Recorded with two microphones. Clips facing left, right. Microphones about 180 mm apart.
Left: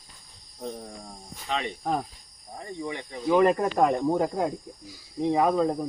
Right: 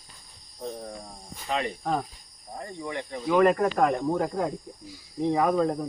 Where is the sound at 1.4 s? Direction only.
5° right (ahead or behind).